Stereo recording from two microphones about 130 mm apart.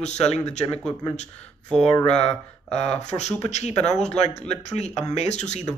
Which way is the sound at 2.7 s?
60° left (ahead or behind).